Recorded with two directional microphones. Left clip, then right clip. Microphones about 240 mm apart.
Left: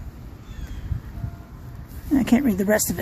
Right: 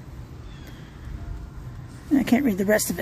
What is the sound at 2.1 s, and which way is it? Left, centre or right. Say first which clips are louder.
Speech: left 1 dB; centre.